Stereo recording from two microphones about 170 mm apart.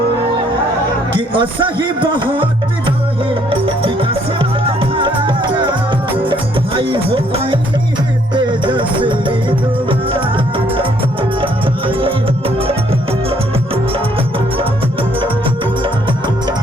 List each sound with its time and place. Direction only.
1.1 s music: 30° right (ahead or behind)